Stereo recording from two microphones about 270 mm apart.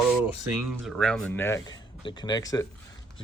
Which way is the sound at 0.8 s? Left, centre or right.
Centre.